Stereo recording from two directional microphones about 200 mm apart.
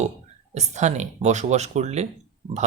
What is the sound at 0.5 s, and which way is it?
Speech, 35° right (ahead or behind).